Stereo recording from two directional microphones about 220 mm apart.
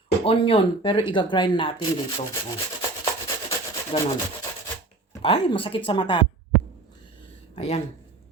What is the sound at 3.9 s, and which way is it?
Speech, 25° left (ahead or behind).